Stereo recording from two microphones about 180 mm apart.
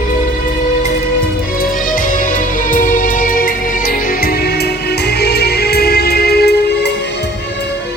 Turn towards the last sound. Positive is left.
turn(degrees=65)  # may be behind; listen again after turning